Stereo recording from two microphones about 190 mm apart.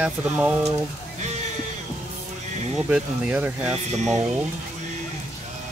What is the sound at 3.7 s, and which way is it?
Speech, 35° right (ahead or behind).